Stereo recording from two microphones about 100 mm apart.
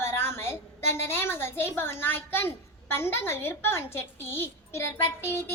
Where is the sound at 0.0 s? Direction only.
25° left (ahead or behind).